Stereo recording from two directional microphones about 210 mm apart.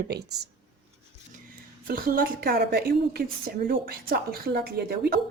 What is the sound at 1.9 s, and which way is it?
A woman's voice, 45° right (ahead or behind).